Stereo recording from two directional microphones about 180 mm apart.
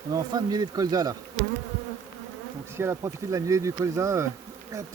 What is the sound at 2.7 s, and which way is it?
Speech, 15° right (ahead or behind).